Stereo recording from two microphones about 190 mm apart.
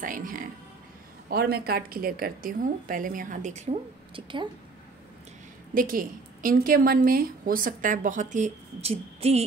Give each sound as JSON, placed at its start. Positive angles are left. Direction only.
{"t": 0.0, "sound": "a woman's voice", "side_deg": -45}
{"t": 5.8, "sound": "a woman's voice", "side_deg": -45}